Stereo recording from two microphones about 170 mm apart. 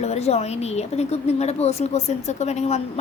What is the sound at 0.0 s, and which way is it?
A woman's voice, 40° left (ahead or behind).